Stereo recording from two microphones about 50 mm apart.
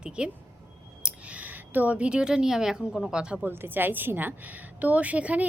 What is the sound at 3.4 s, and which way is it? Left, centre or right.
Speech, right.